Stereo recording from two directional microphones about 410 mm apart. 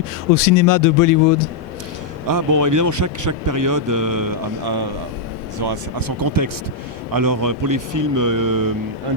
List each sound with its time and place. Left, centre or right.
0.3 s speech: left
2.2 s a man's voice: right